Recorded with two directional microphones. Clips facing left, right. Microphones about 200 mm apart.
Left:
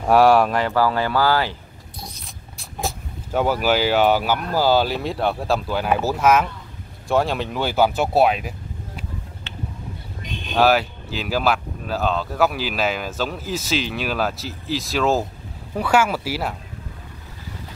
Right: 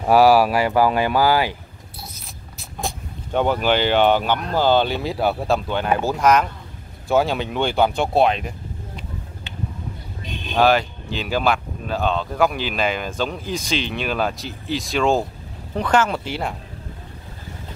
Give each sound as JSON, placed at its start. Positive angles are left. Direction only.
{"t": 0.0, "sound": "vehicle", "side_deg": 0}
{"t": 3.3, "sound": "speech", "side_deg": 5}
{"t": 10.5, "sound": "speech", "side_deg": 5}